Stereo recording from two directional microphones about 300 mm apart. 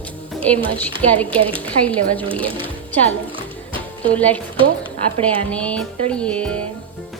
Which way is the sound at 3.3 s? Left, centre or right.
Centre.